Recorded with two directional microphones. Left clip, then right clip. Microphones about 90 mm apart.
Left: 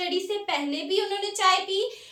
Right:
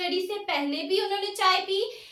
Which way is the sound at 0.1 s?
30° left (ahead or behind).